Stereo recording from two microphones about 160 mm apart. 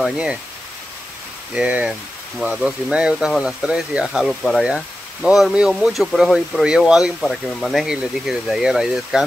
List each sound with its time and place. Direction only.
0.0 s speech: 5° right (ahead or behind)
1.5 s speech: 5° right (ahead or behind)